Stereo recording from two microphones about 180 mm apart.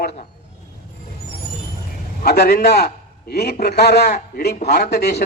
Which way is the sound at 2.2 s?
60° left (ahead or behind).